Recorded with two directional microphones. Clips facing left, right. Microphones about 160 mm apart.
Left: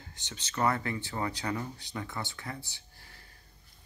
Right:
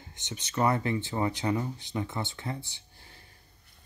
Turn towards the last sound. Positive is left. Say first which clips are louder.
# right 1 dB
turn(degrees=-20)  # may be behind; listen again after turning